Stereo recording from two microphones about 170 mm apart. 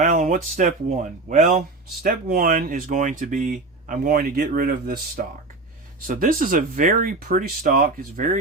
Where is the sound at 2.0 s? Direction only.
55° right (ahead or behind).